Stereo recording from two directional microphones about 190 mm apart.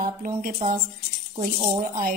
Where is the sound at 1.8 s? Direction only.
45° right (ahead or behind).